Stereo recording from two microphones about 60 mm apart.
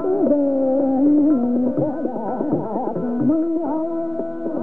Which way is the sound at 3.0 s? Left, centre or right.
Centre.